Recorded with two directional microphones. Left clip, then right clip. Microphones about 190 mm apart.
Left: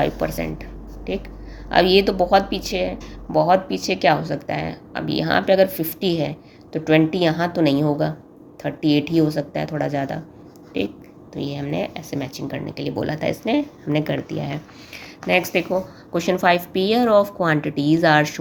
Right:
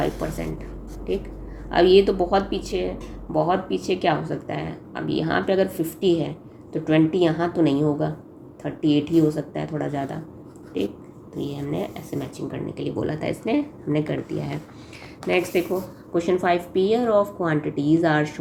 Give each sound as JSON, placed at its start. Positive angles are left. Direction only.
{"t": 0.0, "sound": "speech", "side_deg": 30}
{"t": 1.7, "sound": "speech", "side_deg": 25}
{"t": 11.3, "sound": "speech", "side_deg": 30}